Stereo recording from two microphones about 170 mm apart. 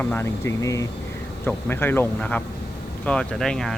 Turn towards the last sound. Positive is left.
turn(degrees=5)  # may be behind; listen again after turning